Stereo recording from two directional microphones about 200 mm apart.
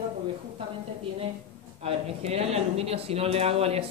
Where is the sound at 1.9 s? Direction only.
30° right (ahead or behind).